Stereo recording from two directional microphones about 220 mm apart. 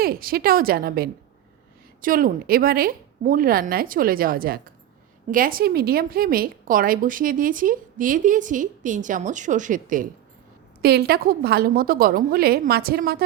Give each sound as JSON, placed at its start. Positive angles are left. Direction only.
{"t": 0.0, "sound": "a woman's voice", "side_deg": -40}